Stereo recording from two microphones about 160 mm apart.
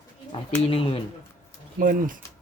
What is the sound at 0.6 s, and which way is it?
Speech, 35° left (ahead or behind).